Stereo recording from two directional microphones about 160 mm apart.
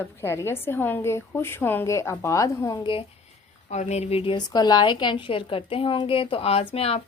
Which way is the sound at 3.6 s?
45° left (ahead or behind).